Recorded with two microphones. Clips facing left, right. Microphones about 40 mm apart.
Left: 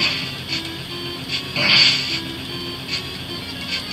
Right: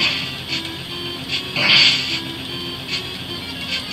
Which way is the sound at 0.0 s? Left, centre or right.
Centre.